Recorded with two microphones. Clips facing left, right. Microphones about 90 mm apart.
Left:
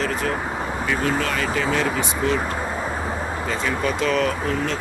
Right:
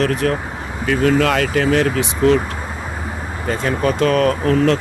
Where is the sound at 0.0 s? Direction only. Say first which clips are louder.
Right 6 dB; 75° right (ahead or behind).